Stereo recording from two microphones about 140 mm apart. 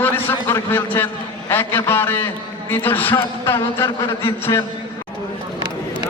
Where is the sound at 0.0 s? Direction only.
15° left (ahead or behind).